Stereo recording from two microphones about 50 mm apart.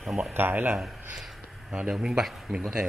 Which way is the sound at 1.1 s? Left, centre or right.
Centre.